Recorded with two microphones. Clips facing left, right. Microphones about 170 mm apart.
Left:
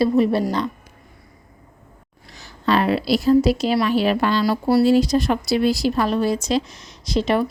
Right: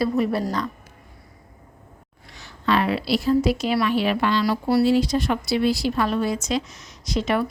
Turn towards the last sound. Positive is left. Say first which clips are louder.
# left 3 dB
turn(degrees=30)  # may be behind; listen again after turning